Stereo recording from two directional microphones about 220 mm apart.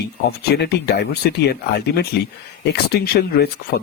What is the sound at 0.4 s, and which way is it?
Speech, 50° left (ahead or behind).